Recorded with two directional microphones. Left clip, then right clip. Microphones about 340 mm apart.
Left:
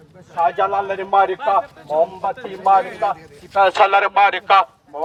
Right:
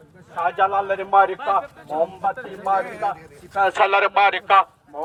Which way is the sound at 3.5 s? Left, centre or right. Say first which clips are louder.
Left 4 dB; centre.